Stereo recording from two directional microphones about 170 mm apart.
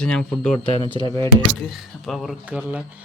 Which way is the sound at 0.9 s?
20° left (ahead or behind).